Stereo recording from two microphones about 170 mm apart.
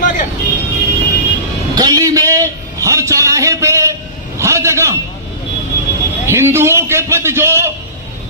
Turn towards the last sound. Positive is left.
turn(degrees=-15)  # may be behind; listen again after turning